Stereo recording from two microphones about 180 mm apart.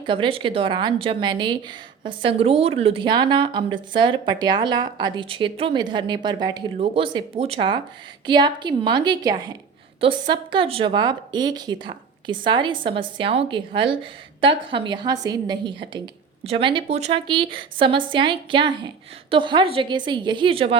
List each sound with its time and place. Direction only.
0.0 s a woman's voice: 25° right (ahead or behind)